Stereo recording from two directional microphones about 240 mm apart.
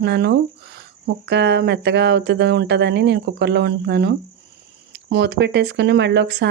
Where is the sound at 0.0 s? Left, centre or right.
Right.